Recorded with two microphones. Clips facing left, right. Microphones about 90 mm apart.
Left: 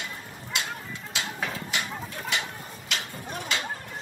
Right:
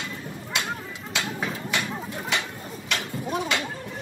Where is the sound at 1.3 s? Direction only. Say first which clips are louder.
Right 2 dB; 15° right (ahead or behind).